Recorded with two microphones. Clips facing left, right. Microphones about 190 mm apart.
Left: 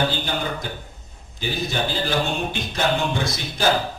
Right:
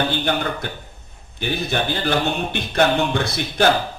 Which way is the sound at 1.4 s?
60° right (ahead or behind).